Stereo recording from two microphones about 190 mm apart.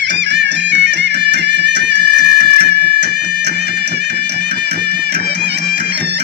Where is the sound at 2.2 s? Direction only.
60° right (ahead or behind).